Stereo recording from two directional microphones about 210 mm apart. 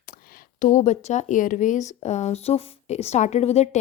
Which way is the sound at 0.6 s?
35° left (ahead or behind).